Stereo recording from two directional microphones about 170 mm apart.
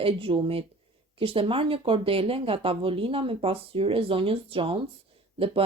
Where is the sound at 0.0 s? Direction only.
35° right (ahead or behind).